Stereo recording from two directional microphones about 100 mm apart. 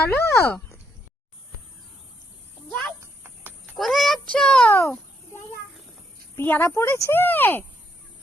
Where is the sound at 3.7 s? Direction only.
Centre (ahead or behind).